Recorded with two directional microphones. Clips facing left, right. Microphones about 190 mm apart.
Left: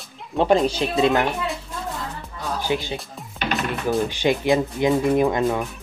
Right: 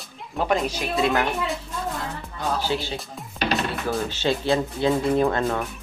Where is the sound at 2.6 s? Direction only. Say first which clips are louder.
Left 2 dB; 15° left (ahead or behind).